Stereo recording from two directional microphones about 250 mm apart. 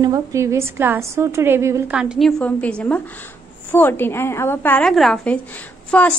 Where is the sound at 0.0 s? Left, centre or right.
Centre.